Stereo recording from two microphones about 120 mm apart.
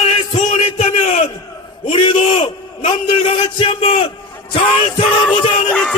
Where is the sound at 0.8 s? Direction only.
70° left (ahead or behind).